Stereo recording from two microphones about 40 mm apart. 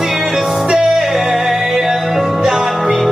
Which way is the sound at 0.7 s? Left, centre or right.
Centre.